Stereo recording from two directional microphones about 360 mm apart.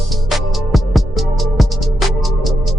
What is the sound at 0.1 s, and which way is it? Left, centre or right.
Music, centre.